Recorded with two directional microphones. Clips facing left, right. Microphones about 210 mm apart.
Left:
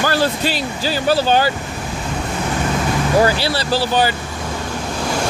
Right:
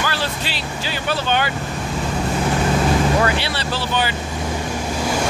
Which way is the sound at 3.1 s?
35° left (ahead or behind).